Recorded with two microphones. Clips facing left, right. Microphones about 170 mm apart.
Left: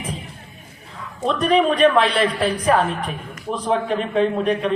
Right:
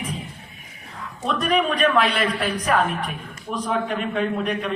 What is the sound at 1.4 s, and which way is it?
A man's voice, 30° left (ahead or behind).